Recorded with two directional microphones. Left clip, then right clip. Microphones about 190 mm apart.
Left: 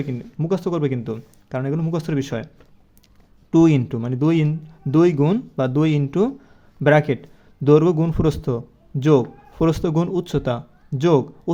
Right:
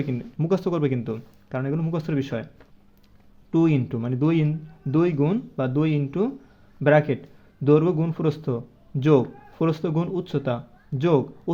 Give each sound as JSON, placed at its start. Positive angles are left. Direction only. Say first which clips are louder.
{"t": 0.0, "sound": "speech", "louder": "left 1 dB", "side_deg": 5}
{"t": 3.5, "sound": "speech", "louder": "left 6 dB", "side_deg": 20}